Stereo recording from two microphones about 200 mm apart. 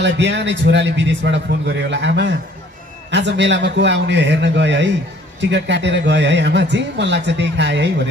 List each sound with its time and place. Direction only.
0.0 s speech: 60° right (ahead or behind)